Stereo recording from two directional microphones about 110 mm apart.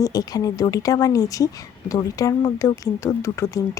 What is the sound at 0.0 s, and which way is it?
Speech, 35° left (ahead or behind).